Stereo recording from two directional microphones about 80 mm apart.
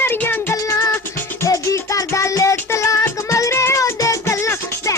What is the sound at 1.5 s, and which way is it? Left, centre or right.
Music, left.